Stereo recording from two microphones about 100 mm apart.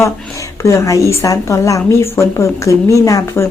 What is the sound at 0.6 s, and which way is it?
A woman's voice, 30° left (ahead or behind).